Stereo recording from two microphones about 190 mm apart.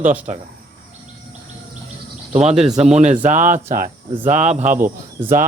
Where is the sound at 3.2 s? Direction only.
40° right (ahead or behind).